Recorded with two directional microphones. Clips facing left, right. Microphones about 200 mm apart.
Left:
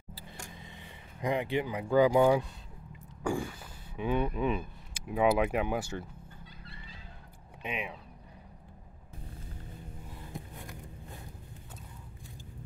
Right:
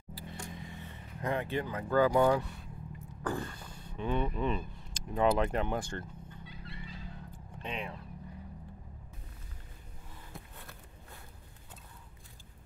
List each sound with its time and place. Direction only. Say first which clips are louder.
0.7 s speech: right 2 dB; 15° left (ahead or behind)
7.5 s speech: left 2 dB; 10° left (ahead or behind)
10.3 s a sound: left 6 dB; 15° left (ahead or behind)